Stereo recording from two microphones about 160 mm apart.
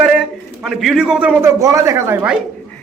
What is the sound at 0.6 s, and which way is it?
A man's voice, centre (ahead or behind).